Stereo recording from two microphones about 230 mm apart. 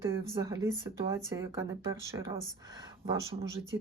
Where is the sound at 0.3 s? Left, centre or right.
Centre.